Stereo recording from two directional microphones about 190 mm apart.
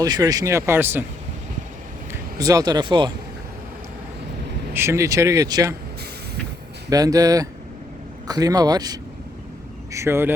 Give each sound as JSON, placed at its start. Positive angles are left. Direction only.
{"t": 0.0, "sound": "speech", "side_deg": -20}
{"t": 2.4, "sound": "speech", "side_deg": -20}
{"t": 4.7, "sound": "speech", "side_deg": -15}
{"t": 6.9, "sound": "speech", "side_deg": -20}